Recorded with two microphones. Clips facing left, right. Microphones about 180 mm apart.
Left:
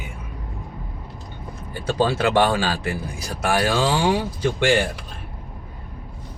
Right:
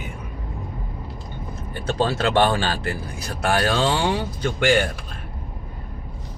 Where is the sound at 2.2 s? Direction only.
10° left (ahead or behind).